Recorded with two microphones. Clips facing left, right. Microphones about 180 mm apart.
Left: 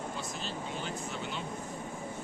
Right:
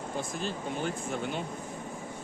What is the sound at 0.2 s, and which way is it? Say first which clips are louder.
Speech: right 4 dB; 50° right (ahead or behind).